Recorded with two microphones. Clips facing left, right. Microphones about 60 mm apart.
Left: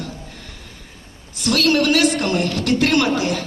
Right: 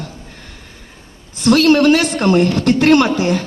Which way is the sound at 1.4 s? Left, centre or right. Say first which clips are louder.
Right 7 dB; right.